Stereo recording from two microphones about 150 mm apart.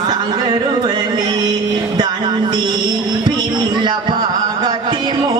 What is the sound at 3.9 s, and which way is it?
Music, 30° right (ahead or behind).